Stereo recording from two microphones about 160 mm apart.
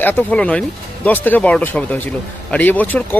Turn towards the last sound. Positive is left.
turn(degrees=10)  # may be behind; listen again after turning